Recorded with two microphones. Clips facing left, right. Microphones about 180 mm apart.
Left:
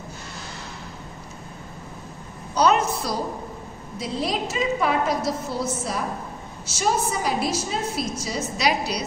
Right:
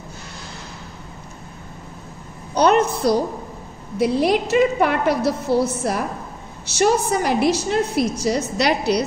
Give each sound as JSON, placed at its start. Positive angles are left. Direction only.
{"t": 2.5, "sound": "a woman's voice", "side_deg": -60}